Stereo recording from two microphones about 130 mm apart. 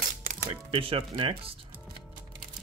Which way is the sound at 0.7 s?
45° right (ahead or behind).